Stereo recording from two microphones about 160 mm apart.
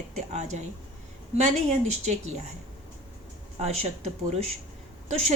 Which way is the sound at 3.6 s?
45° right (ahead or behind).